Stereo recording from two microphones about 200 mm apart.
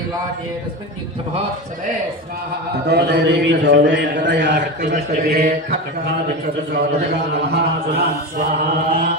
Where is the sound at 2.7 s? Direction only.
55° right (ahead or behind).